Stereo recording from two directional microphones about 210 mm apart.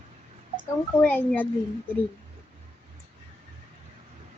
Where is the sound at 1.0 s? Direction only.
5° left (ahead or behind).